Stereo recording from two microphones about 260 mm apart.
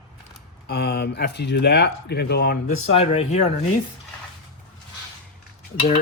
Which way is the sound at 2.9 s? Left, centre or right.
Left.